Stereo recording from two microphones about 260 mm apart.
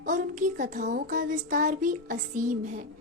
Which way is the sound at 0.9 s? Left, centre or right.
Right.